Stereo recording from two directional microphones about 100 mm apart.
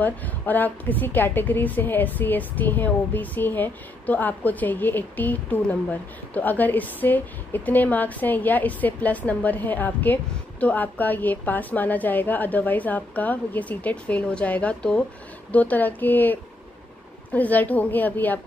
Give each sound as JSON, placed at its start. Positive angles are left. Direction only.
{"t": 0.0, "sound": "a woman's voice", "side_deg": 15}